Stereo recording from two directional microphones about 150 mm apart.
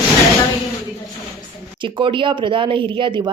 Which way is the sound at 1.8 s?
35° right (ahead or behind).